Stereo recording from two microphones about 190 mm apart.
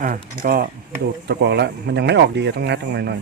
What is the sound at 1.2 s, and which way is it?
Speech, 60° right (ahead or behind).